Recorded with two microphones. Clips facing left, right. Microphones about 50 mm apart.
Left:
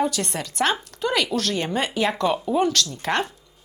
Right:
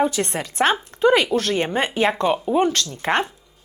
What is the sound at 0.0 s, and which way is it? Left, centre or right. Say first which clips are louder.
Speech: right 3 dB; right.